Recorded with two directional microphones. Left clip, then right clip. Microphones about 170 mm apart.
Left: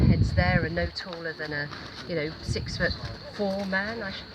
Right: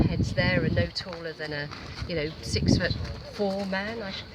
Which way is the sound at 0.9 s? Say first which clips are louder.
Left 1 dB; 25° right (ahead or behind).